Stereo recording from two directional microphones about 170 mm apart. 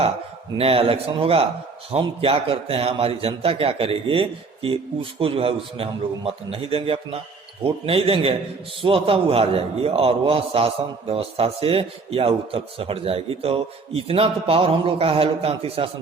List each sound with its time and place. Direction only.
0.5 s a man's voice: 35° right (ahead or behind)